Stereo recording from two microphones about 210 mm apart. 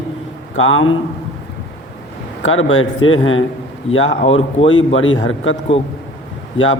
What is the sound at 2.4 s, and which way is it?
A man's voice, 70° left (ahead or behind).